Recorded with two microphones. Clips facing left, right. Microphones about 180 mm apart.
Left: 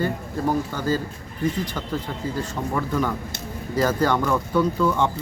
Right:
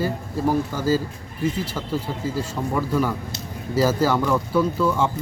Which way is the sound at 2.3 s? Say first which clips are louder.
Right 1 dB; 10° right (ahead or behind).